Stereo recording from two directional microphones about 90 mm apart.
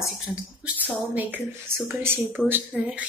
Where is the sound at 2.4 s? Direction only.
20° right (ahead or behind).